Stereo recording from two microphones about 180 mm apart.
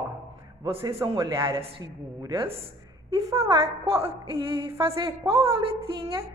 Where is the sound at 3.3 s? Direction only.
15° right (ahead or behind).